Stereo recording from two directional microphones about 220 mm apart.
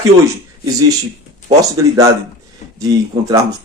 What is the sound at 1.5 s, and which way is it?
Speech, 15° right (ahead or behind).